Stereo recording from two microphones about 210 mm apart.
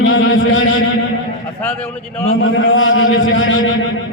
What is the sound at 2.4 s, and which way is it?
A man's voice, 65° left (ahead or behind).